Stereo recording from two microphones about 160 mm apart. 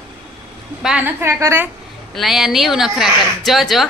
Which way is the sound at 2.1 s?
Centre (ahead or behind).